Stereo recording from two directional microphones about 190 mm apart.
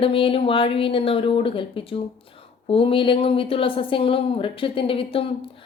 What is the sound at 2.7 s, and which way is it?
A woman's voice, 30° left (ahead or behind).